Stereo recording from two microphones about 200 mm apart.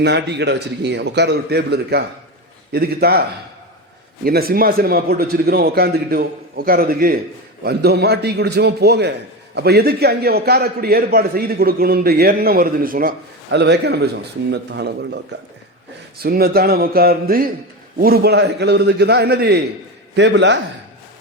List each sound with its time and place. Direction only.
0.0 s a man's voice: 60° right (ahead or behind)
4.3 s a man's voice: 50° right (ahead or behind)